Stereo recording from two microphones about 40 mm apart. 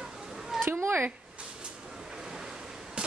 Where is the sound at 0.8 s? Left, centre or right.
Right.